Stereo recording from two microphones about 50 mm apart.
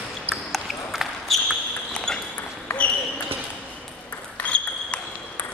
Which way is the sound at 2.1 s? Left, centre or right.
Centre.